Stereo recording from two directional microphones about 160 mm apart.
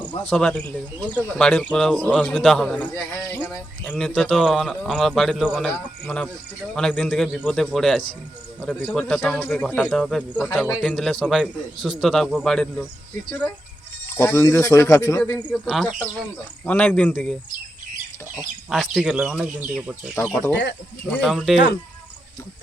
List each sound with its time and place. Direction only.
0.3 s a man's voice: 5° left (ahead or behind)
14.2 s speech: 20° left (ahead or behind)
15.7 s a man's voice: centre (ahead or behind)
18.7 s a man's voice: centre (ahead or behind)
20.3 s speech: 15° left (ahead or behind)
21.1 s a man's voice: centre (ahead or behind)